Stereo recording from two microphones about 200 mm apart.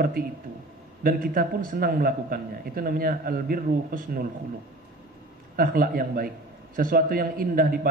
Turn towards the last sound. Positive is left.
turn(degrees=-45)  # may be behind; listen again after turning